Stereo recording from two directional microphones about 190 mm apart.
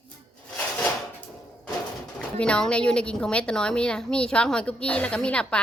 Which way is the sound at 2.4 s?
5° left (ahead or behind).